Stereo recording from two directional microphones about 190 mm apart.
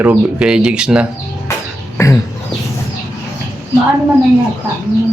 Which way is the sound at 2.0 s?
15° left (ahead or behind).